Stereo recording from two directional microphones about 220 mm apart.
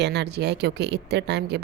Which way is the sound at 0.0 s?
50° right (ahead or behind).